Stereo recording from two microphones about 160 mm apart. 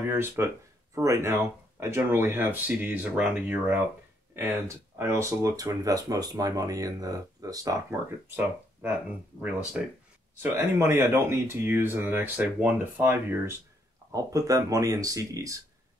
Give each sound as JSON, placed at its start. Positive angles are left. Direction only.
{"t": 0.0, "sound": "speech", "side_deg": -10}
{"t": 9.4, "sound": "speech", "side_deg": -5}
{"t": 10.4, "sound": "speech", "side_deg": -15}